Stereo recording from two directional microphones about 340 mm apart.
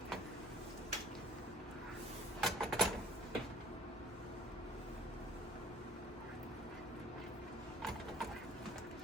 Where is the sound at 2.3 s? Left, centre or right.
Centre.